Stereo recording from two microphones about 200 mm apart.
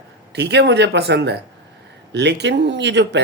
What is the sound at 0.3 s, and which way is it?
Speech, 55° right (ahead or behind).